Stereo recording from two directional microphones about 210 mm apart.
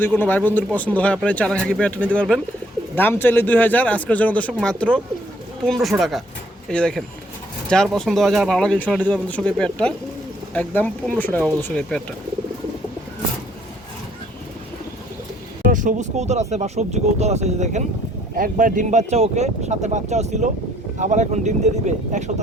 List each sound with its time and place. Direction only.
0.0 s speech: 10° left (ahead or behind)
15.7 s speech: 40° right (ahead or behind)